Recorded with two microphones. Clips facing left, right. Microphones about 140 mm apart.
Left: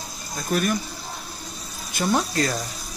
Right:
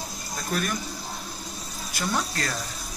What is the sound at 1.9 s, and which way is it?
Speech, 20° left (ahead or behind).